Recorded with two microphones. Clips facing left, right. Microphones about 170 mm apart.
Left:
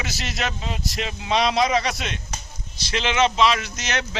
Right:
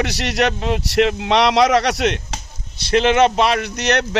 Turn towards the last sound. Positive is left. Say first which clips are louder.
# right 9 dB
turn(degrees=-65)  # may be behind; listen again after turning